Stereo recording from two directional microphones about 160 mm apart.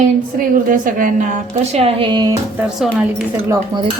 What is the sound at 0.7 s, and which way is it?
Speech, 60° right (ahead or behind).